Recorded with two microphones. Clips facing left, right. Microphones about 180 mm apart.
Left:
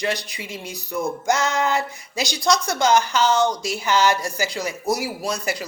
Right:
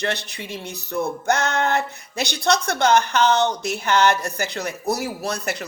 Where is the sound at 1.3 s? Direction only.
60° right (ahead or behind).